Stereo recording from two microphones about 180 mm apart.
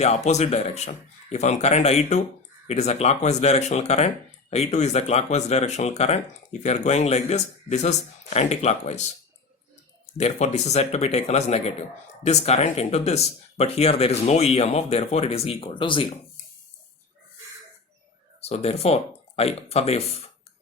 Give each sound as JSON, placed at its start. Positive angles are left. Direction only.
{"t": 0.0, "sound": "speech", "side_deg": 40}
{"t": 10.2, "sound": "speech", "side_deg": 40}
{"t": 18.3, "sound": "speech", "side_deg": 35}